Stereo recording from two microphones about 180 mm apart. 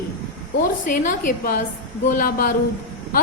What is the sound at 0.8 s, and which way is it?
A woman's voice, 45° left (ahead or behind).